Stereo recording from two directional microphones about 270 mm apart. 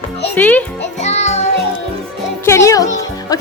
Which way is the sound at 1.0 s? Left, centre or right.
Left.